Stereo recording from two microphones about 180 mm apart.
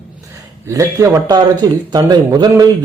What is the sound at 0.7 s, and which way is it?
A man's voice, 15° right (ahead or behind).